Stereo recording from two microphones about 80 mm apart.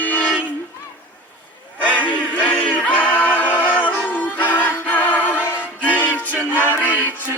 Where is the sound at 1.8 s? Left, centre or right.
Centre.